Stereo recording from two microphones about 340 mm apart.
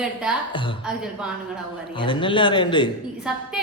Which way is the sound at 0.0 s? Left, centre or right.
Centre.